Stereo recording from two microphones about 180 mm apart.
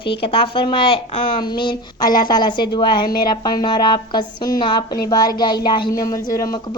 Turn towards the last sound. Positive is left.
turn(degrees=20)  # may be behind; listen again after turning